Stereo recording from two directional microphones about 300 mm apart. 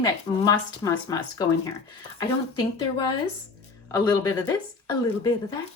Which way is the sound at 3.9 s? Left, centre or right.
Centre.